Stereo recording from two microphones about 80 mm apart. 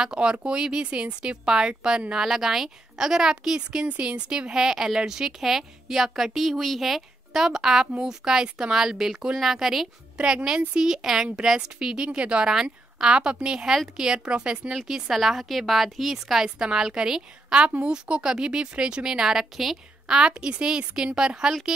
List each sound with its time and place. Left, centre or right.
0.0 s a woman's voice: centre
17.6 s a woman's voice: right